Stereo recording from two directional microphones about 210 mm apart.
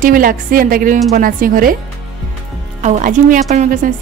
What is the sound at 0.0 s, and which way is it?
A woman's voice, 40° right (ahead or behind).